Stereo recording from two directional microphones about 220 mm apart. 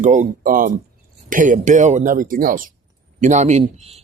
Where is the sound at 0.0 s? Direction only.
35° right (ahead or behind).